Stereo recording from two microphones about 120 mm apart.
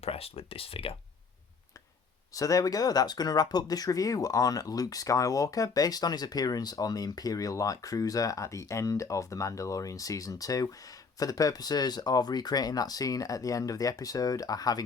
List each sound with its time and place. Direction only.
0.0 s speech: 55° left (ahead or behind)
2.3 s speech: 30° left (ahead or behind)